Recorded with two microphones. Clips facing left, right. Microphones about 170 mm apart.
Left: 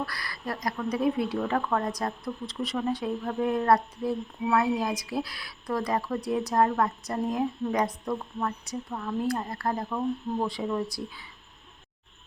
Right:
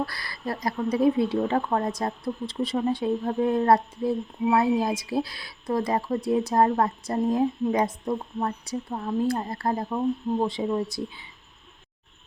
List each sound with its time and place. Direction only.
0.0 s speech: 25° right (ahead or behind)